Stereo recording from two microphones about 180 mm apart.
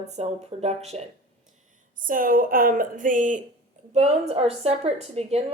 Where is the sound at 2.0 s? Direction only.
50° right (ahead or behind).